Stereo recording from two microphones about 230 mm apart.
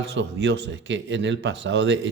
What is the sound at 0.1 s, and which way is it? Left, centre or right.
Speech, right.